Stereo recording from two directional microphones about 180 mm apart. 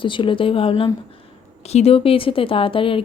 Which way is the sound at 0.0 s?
30° left (ahead or behind).